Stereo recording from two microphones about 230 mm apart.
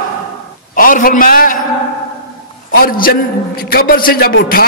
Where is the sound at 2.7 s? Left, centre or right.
Left.